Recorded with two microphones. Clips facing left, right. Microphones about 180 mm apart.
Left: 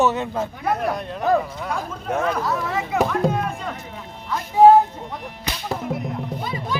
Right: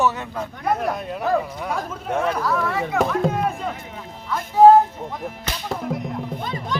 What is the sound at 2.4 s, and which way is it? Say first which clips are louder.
Speech: right 2 dB; 20° left (ahead or behind).